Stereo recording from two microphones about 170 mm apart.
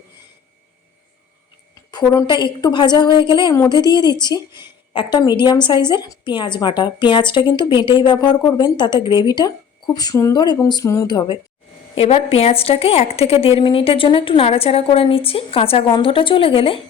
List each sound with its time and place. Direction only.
1.9 s a woman's voice: 25° left (ahead or behind)
11.9 s a woman's voice: 35° left (ahead or behind)